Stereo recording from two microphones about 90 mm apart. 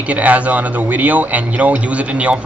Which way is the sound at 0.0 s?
15° right (ahead or behind).